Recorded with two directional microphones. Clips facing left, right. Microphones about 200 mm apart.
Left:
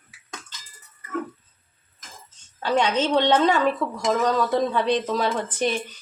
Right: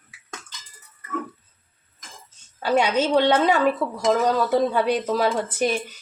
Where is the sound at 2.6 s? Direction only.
10° right (ahead or behind).